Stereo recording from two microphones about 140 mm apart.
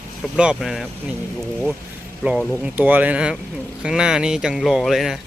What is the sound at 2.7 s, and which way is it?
Speech, 10° right (ahead or behind).